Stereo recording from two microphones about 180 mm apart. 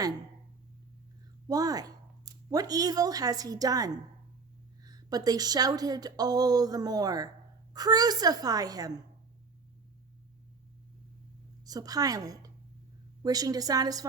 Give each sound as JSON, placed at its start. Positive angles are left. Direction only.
{"t": 1.5, "sound": "a woman's voice", "side_deg": -20}
{"t": 11.6, "sound": "a woman's voice", "side_deg": -20}